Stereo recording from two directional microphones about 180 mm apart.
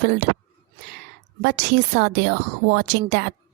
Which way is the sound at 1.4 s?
60° right (ahead or behind).